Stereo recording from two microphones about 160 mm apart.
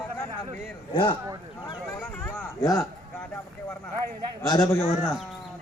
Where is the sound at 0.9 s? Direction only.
30° left (ahead or behind).